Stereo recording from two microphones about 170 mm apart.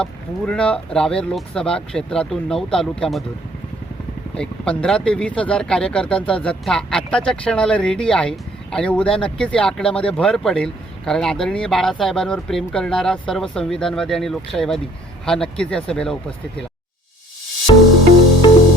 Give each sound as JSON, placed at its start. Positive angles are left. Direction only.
{"t": 0.0, "sound": "speech", "side_deg": 5}
{"t": 4.4, "sound": "speech", "side_deg": 5}
{"t": 17.7, "sound": "music", "side_deg": 25}